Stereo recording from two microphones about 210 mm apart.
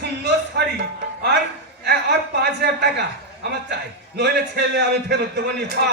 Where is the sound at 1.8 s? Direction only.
50° right (ahead or behind).